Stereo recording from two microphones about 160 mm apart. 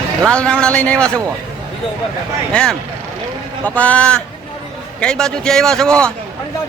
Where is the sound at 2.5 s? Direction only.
5° left (ahead or behind).